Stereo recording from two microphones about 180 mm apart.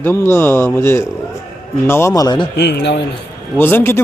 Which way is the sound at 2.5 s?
70° left (ahead or behind).